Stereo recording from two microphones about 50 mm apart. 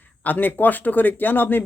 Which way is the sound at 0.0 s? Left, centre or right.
Left.